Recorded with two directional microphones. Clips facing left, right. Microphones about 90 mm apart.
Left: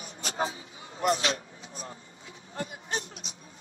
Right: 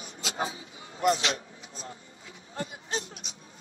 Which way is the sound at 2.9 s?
35° left (ahead or behind).